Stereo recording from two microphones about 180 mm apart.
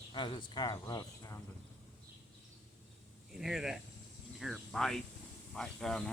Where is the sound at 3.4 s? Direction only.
5° right (ahead or behind).